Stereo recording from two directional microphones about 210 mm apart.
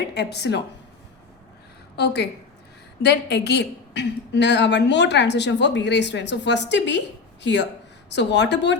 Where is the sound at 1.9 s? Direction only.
50° left (ahead or behind).